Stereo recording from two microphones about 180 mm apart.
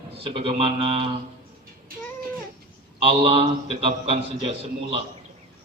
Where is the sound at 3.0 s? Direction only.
30° right (ahead or behind).